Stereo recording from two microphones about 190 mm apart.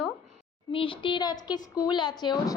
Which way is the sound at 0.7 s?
30° left (ahead or behind).